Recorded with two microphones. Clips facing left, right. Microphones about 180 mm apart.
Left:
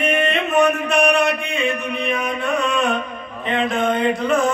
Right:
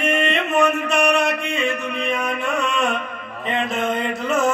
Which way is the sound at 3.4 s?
Centre (ahead or behind).